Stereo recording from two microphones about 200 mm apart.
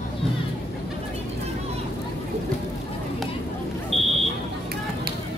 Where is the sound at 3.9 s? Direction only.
30° right (ahead or behind).